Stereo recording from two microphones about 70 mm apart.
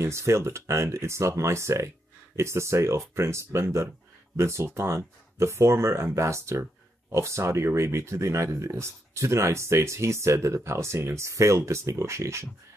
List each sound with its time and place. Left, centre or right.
0.0 s speech: right